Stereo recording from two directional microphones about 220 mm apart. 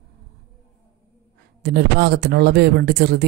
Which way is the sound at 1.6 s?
50° right (ahead or behind).